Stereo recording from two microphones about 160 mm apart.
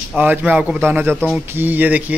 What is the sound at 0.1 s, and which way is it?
Speech, 10° right (ahead or behind).